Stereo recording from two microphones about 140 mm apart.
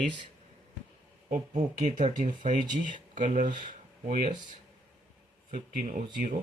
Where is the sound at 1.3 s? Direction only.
60° right (ahead or behind).